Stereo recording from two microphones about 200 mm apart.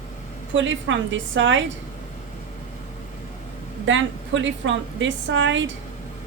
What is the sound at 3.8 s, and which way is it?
A woman's voice, 70° right (ahead or behind).